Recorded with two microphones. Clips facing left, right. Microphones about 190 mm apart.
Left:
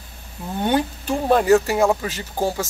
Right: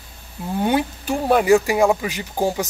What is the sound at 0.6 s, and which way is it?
Speech, 10° right (ahead or behind).